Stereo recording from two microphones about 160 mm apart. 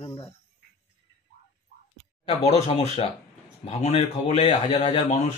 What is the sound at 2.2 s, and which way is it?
Speech, 40° left (ahead or behind).